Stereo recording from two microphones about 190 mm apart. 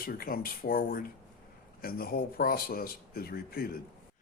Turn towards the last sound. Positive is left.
turn(degrees=50)  # may be behind; listen again after turning